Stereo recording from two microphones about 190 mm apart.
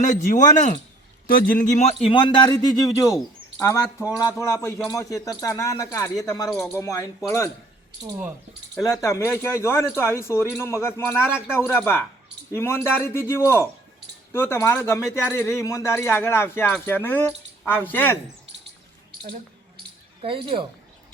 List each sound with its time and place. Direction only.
0.0 s a man's voice: 40° left (ahead or behind); by 7.5 s 15° left (ahead or behind)
8.8 s speech: 15° left (ahead or behind)
19.2 s a sound: 50° right (ahead or behind)
20.2 s a woman's voice: 30° right (ahead or behind)